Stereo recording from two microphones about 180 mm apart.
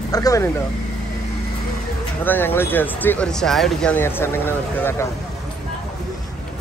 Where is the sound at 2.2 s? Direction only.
10° left (ahead or behind).